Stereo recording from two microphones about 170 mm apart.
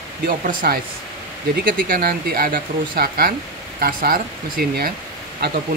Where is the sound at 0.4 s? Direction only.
55° right (ahead or behind).